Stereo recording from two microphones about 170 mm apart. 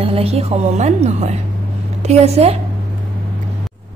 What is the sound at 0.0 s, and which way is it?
A woman's voice, 35° right (ahead or behind).